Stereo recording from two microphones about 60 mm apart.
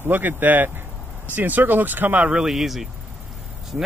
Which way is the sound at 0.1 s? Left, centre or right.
Right.